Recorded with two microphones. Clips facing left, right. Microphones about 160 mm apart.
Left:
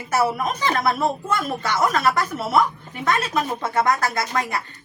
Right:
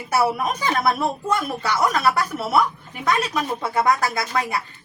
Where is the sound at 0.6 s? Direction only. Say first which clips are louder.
Left 1 dB; 10° right (ahead or behind).